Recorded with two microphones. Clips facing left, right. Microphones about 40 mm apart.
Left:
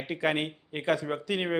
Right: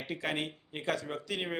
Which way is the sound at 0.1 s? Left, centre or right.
Centre.